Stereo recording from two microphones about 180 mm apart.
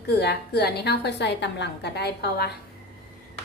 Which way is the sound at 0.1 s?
65° left (ahead or behind).